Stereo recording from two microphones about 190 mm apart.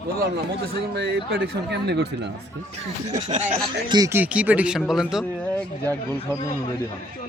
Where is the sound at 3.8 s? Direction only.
20° right (ahead or behind); by 5.6 s centre (ahead or behind).